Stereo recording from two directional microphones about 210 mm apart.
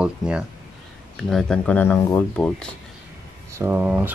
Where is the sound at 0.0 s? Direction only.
5° right (ahead or behind).